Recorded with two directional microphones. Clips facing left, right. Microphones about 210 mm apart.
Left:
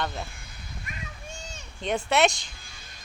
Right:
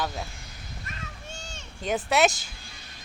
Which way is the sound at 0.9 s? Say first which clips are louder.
Left 1 dB; 10° left (ahead or behind).